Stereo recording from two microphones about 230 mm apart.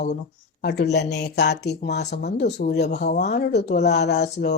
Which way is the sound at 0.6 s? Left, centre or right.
Left.